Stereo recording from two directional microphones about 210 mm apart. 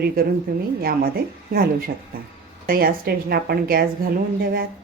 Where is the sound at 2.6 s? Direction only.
45° right (ahead or behind).